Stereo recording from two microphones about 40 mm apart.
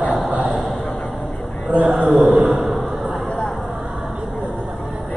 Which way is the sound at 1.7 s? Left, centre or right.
Right.